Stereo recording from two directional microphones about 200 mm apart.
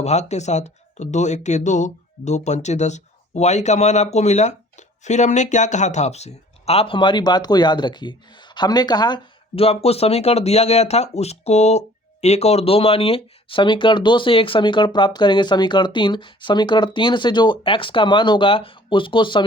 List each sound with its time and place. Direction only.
0.0 s speech: 35° left (ahead or behind)